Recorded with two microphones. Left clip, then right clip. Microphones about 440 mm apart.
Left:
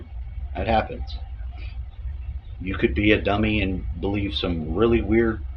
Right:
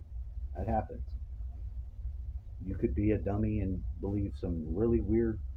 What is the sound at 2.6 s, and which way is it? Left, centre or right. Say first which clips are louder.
Speech: left 11 dB; right.